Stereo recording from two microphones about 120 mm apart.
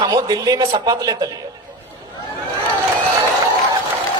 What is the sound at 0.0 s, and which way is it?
A man's voice, 30° right (ahead or behind).